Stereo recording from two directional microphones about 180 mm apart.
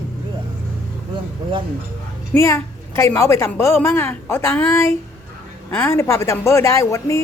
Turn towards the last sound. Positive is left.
turn(degrees=15)  # may be behind; listen again after turning